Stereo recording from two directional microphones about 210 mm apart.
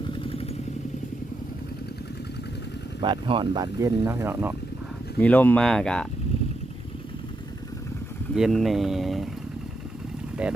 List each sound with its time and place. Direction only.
0.2 s motorcycle: 25° left (ahead or behind)
3.0 s speech: 25° right (ahead or behind)
5.2 s speech: 10° left (ahead or behind)
8.4 s speech: centre (ahead or behind)
10.4 s speech: 5° right (ahead or behind)